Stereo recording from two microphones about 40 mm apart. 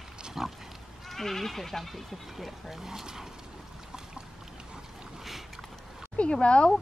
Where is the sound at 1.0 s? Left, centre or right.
Centre.